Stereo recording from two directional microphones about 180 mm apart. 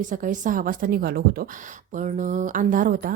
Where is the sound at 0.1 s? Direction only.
45° right (ahead or behind).